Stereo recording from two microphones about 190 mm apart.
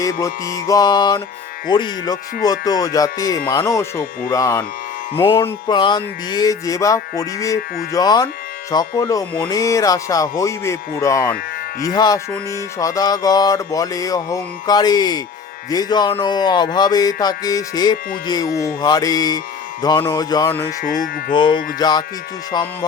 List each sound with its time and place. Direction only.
0.0 s speech: 15° left (ahead or behind)
1.7 s music: 20° left (ahead or behind)
9.5 s speech: 15° left (ahead or behind)
11.8 s music: 20° left (ahead or behind)
20.5 s speech: 10° left (ahead or behind)
21.3 s music: 25° left (ahead or behind)